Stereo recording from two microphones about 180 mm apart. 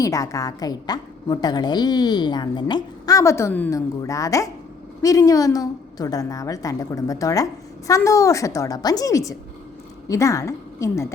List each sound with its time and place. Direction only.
0.0 s a woman's voice: 20° left (ahead or behind)